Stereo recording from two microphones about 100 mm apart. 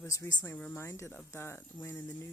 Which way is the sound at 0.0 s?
25° left (ahead or behind).